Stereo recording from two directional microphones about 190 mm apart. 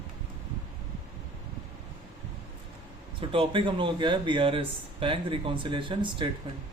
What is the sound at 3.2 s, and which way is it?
Speech, 25° right (ahead or behind).